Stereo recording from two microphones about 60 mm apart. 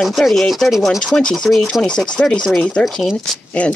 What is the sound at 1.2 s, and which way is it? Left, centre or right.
Speech, centre.